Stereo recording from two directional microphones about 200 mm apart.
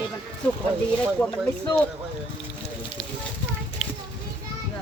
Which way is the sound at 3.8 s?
Centre (ahead or behind).